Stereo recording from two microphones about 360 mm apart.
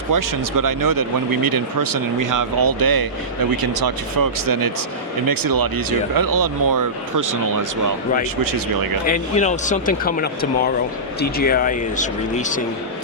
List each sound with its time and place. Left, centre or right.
0.1 s speech: right
9.0 s speech: left